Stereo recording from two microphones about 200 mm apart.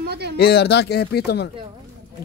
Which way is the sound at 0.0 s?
55° right (ahead or behind).